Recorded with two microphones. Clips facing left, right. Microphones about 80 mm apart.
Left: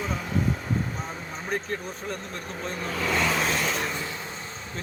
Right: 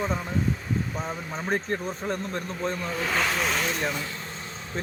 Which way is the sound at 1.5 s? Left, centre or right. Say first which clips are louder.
Right 3 dB; right.